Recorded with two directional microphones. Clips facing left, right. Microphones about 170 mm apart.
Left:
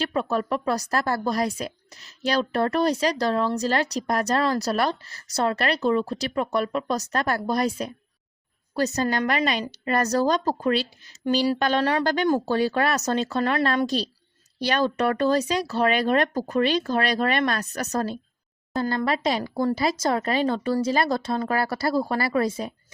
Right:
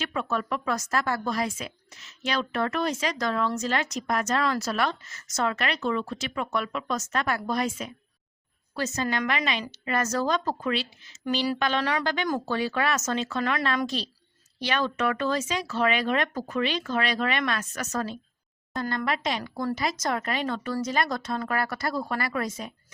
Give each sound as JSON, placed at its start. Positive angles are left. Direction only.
{"t": 0.0, "sound": "a woman's voice", "side_deg": 35}